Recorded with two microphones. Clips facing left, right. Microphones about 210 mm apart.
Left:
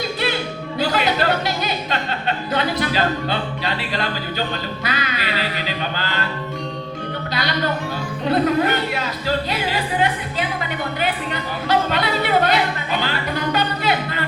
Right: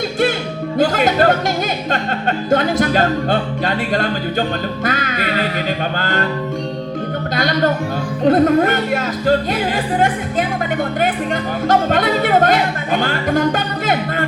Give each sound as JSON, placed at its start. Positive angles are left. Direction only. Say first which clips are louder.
{"t": 0.8, "sound": "music", "louder": "right 6 dB", "side_deg": -50}
{"t": 7.3, "sound": "music", "louder": "right 6 dB", "side_deg": -50}
{"t": 11.7, "sound": "music", "louder": "right 4 dB", "side_deg": -50}